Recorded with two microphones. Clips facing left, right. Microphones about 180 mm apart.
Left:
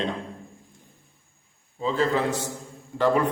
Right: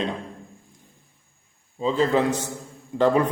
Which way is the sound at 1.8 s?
20° right (ahead or behind).